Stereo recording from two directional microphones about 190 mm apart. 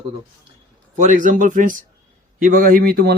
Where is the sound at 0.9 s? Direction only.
40° right (ahead or behind).